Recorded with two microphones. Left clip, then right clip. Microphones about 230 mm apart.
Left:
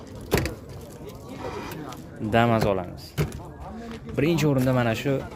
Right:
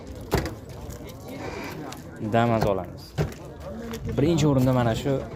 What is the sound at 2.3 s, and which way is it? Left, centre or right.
Speech, centre.